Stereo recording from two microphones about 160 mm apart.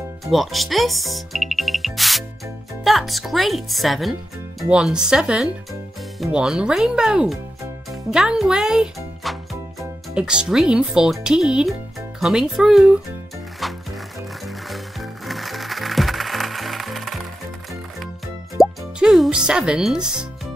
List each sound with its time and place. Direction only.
0.2 s a child's voice: centre (ahead or behind)
13.6 s music: centre (ahead or behind)
18.6 s plop: centre (ahead or behind)